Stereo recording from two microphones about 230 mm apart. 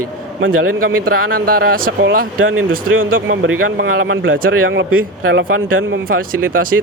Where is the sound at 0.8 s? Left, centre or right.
Right.